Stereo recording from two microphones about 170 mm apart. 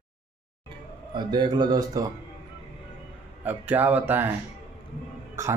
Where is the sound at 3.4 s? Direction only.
10° right (ahead or behind).